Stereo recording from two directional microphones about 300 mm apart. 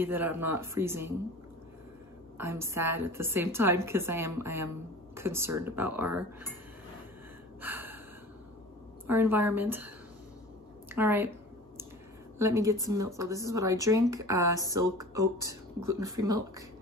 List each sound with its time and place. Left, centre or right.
0.0 s a woman's voice: centre
2.3 s a woman's voice: centre
7.6 s gasp: centre
9.0 s a woman's voice: centre
10.9 s a sound: centre
12.4 s a woman's voice: centre